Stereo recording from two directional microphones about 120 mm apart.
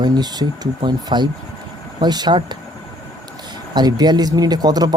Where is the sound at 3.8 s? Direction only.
35° right (ahead or behind).